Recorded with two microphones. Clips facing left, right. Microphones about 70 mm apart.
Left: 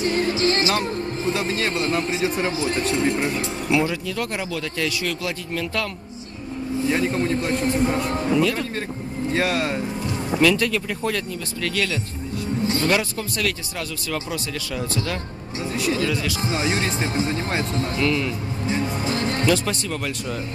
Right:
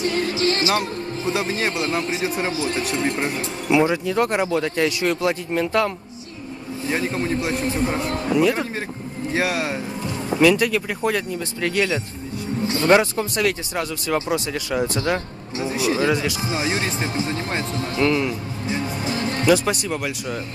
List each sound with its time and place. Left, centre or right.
0.0 s music: left
1.2 s speech: centre
3.7 s speech: right
6.9 s speech: centre
17.9 s speech: right